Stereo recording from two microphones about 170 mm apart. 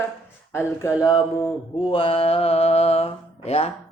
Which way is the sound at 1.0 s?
25° left (ahead or behind).